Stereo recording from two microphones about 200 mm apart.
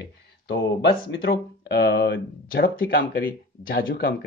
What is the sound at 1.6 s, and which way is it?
Speech, 55° left (ahead or behind).